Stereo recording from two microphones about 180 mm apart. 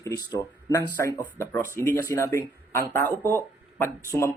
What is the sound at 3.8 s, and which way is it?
Speech, 15° left (ahead or behind).